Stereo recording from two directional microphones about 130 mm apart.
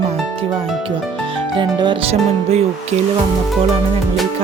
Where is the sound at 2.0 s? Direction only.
55° right (ahead or behind).